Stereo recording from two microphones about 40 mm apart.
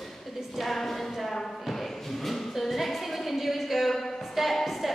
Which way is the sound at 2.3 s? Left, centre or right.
Centre.